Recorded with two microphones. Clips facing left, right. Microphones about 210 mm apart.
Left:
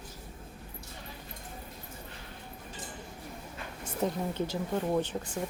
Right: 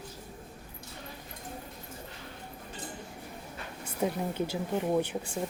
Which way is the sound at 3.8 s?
10° right (ahead or behind).